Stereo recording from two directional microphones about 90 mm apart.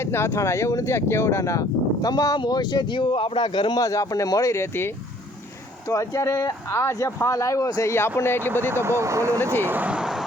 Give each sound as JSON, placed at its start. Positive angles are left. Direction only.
{"t": 0.0, "sound": "speech", "side_deg": 30}
{"t": 3.8, "sound": "speech", "side_deg": 40}
{"t": 5.9, "sound": "speech", "side_deg": 35}
{"t": 8.7, "sound": "speech", "side_deg": -30}
{"t": 9.6, "sound": "speech", "side_deg": -20}